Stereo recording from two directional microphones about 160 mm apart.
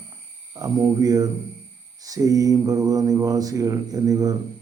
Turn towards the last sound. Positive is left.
turn(degrees=-25)  # may be behind; listen again after turning